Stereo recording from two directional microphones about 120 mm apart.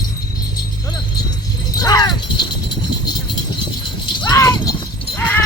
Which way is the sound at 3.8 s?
40° left (ahead or behind).